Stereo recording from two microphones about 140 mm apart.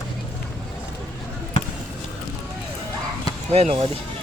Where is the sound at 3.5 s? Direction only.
45° right (ahead or behind).